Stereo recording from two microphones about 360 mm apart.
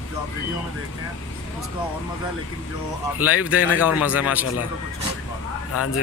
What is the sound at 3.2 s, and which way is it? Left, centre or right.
A man's voice, centre.